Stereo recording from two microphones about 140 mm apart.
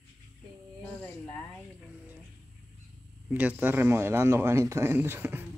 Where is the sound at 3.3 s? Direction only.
10° right (ahead or behind).